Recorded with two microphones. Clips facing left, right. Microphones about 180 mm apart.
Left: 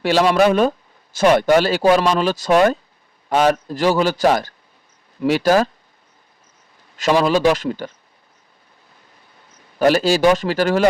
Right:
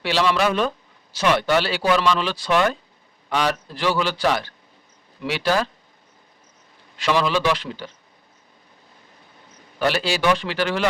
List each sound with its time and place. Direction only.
0.0 s speech: 45° left (ahead or behind)
6.9 s speech: 45° left (ahead or behind)
9.7 s speech: 45° left (ahead or behind)